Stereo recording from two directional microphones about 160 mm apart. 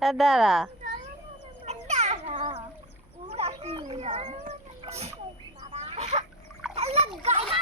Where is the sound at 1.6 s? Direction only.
45° right (ahead or behind).